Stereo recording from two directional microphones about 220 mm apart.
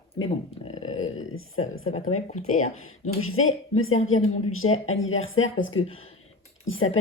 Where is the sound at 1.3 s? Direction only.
65° left (ahead or behind).